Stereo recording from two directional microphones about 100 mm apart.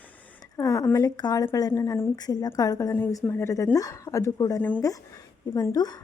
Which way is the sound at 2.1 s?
40° left (ahead or behind).